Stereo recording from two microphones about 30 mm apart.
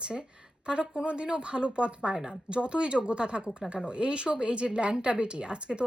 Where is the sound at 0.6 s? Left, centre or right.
Right.